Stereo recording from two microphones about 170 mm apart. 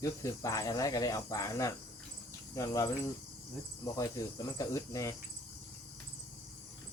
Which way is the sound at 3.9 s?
20° left (ahead or behind).